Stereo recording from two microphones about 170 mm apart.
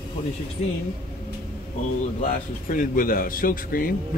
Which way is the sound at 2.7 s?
55° left (ahead or behind).